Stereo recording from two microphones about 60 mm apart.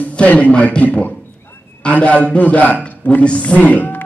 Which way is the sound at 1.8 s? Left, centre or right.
Left.